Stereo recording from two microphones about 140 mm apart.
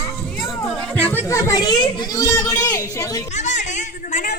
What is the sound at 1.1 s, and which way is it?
A woman's voice, 20° left (ahead or behind).